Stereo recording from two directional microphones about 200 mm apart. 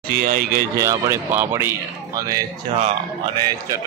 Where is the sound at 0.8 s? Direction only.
15° right (ahead or behind).